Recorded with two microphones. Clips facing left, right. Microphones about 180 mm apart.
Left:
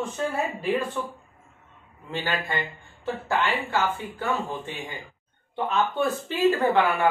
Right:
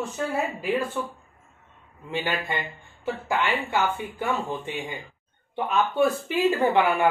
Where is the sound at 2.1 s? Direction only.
15° right (ahead or behind).